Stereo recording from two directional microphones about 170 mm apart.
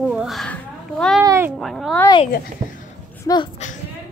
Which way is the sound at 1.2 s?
15° right (ahead or behind).